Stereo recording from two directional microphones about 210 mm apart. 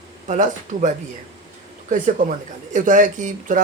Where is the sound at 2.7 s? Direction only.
35° right (ahead or behind).